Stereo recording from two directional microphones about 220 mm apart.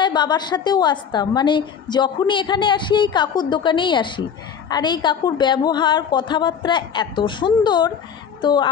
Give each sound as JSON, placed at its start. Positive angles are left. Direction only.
{"t": 0.0, "sound": "a woman's voice", "side_deg": 20}